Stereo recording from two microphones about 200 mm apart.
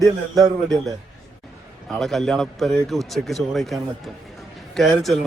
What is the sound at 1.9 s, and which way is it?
A man's voice, centre (ahead or behind).